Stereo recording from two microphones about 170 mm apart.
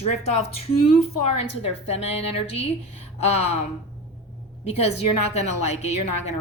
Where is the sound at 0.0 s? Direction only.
40° left (ahead or behind).